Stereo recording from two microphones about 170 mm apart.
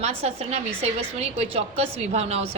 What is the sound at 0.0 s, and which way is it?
A woman's voice, 35° right (ahead or behind).